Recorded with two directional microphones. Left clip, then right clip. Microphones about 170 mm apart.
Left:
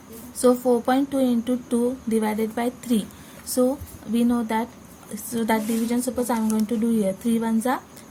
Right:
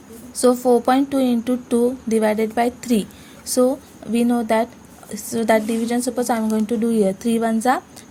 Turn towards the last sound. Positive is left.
turn(degrees=-35)  # may be behind; listen again after turning